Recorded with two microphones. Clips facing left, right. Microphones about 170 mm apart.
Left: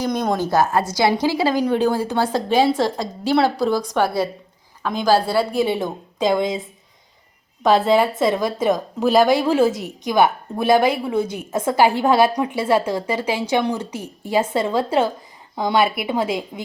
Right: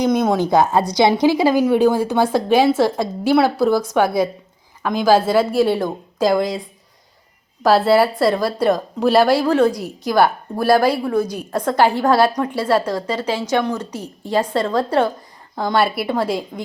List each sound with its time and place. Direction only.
0.1 s a woman's voice: 5° right (ahead or behind)
0.9 s a woman's voice: 15° right (ahead or behind); by 10.9 s centre (ahead or behind)
11.0 s a woman's voice: 25° left (ahead or behind)
11.5 s a woman's voice: 5° left (ahead or behind)